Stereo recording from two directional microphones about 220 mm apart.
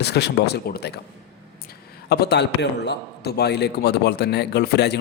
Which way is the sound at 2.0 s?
45° left (ahead or behind).